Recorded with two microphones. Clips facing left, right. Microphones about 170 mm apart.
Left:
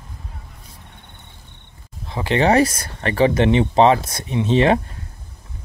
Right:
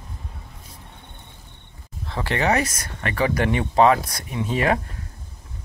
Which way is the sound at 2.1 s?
15° left (ahead or behind).